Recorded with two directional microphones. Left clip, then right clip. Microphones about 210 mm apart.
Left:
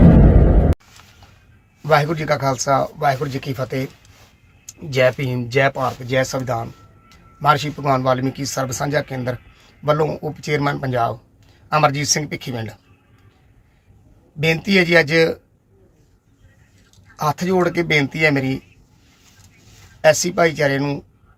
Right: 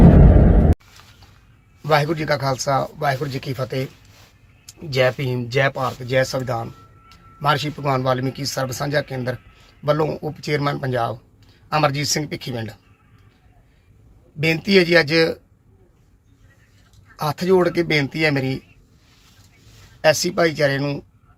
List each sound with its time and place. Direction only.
1.8 s speech: 5° left (ahead or behind)
14.4 s speech: 5° left (ahead or behind)
17.2 s speech: 5° left (ahead or behind)
20.0 s speech: 5° left (ahead or behind)